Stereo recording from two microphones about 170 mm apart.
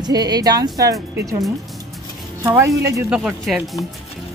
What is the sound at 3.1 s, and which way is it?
Speech, 5° right (ahead or behind).